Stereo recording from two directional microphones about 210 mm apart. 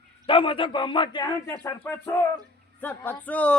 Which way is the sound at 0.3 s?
25° left (ahead or behind).